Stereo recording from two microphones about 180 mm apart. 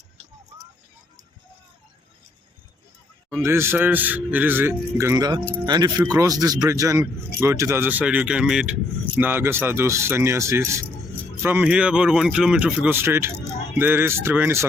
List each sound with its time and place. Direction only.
3.2 s speech: 15° right (ahead or behind)